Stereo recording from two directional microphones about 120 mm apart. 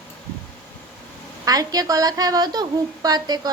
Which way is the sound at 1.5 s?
30° right (ahead or behind).